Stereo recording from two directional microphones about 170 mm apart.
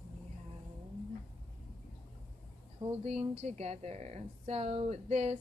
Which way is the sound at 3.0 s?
40° right (ahead or behind).